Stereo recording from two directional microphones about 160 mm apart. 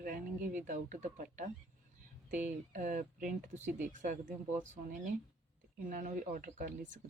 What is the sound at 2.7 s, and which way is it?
Speech, 50° right (ahead or behind).